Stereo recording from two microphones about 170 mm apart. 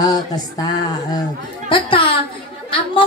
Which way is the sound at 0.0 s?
20° left (ahead or behind).